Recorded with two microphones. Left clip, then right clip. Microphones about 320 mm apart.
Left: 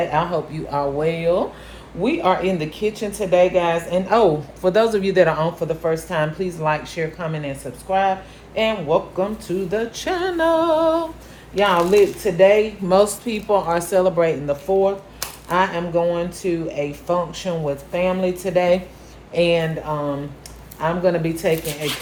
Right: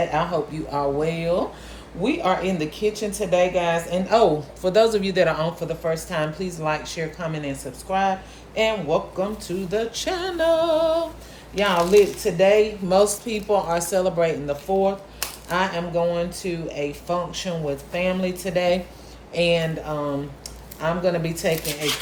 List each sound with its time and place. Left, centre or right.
0.1 s a woman's voice: centre